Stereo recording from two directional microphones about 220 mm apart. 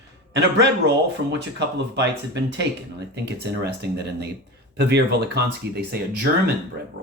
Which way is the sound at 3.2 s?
50° right (ahead or behind).